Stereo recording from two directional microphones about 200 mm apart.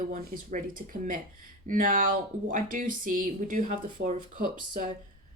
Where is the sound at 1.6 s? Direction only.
40° right (ahead or behind).